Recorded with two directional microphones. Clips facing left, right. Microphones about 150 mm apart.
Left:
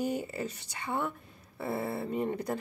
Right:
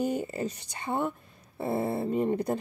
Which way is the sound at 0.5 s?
20° right (ahead or behind).